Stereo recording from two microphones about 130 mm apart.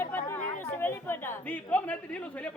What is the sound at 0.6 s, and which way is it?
Speech, 15° left (ahead or behind).